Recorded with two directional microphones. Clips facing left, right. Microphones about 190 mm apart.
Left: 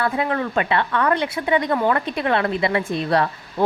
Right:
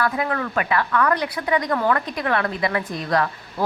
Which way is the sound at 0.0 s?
25° left (ahead or behind).